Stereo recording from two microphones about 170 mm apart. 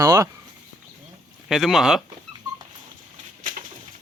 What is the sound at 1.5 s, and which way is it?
Speech, centre (ahead or behind).